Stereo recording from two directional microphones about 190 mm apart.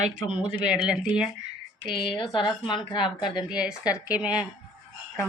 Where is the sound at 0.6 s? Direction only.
5° right (ahead or behind).